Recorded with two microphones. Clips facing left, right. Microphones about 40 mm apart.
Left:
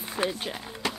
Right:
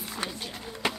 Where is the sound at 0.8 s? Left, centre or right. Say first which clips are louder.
Right 1 dB; centre.